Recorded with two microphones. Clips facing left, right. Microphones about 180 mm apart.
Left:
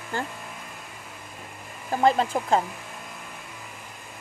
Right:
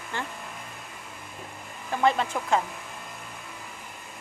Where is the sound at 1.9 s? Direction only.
35° left (ahead or behind).